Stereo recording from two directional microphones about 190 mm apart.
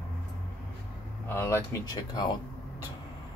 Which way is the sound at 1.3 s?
15° left (ahead or behind).